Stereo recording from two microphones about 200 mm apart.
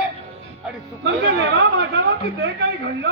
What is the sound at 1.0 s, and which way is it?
Speech, 55° right (ahead or behind).